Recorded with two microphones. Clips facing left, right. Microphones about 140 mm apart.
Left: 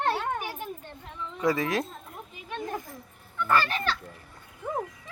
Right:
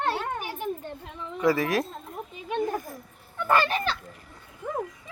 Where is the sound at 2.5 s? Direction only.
20° right (ahead or behind).